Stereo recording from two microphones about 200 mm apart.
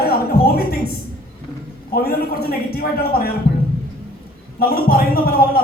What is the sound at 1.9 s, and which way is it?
A man's voice, 50° left (ahead or behind).